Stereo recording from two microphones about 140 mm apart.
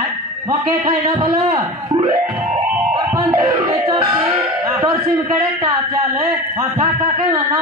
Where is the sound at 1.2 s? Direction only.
20° right (ahead or behind).